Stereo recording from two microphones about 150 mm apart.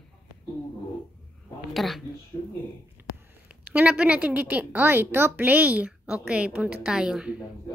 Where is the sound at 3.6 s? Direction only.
10° right (ahead or behind).